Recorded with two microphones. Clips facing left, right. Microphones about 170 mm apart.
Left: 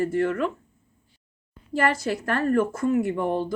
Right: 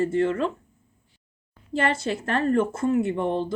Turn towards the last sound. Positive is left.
turn(degrees=-25)  # may be behind; listen again after turning